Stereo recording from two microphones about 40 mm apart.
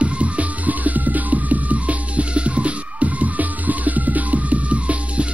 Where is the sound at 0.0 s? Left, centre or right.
Right.